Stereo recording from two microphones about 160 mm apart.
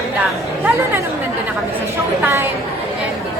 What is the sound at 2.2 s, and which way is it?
Speech, 15° right (ahead or behind).